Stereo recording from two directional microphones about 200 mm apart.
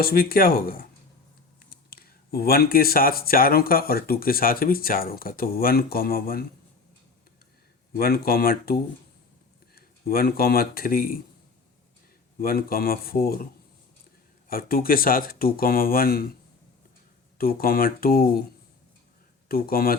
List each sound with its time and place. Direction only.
0.0 s speech: 50° left (ahead or behind)
7.9 s speech: 50° left (ahead or behind)
12.4 s speech: 50° left (ahead or behind)
17.3 s speech: 50° left (ahead or behind)
19.5 s speech: 50° left (ahead or behind)